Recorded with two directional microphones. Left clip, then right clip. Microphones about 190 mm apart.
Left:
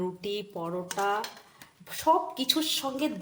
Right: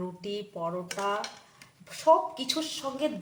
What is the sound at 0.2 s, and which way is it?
A woman's voice, 35° left (ahead or behind).